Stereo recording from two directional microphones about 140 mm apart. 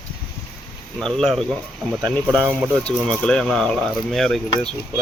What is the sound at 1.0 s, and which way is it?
Speech, 5° left (ahead or behind).